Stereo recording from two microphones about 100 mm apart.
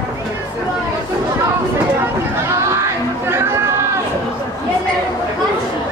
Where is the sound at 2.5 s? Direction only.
25° right (ahead or behind).